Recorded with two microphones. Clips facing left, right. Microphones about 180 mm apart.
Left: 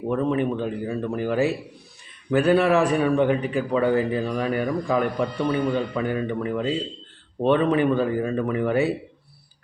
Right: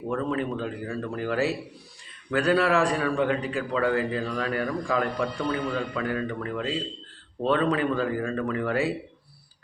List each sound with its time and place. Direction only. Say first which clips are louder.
0.1 s a man's voice: left 5 dB; 20° left (ahead or behind)